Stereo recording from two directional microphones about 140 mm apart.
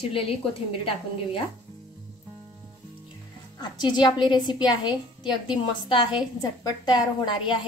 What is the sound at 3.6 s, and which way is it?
A woman's voice, 30° left (ahead or behind).